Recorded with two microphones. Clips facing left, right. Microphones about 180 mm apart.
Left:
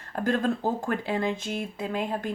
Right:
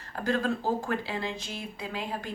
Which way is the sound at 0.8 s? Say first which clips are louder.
Left 4 dB; 50° left (ahead or behind).